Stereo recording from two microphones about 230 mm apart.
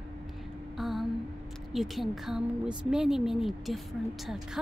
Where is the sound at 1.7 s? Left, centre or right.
Centre.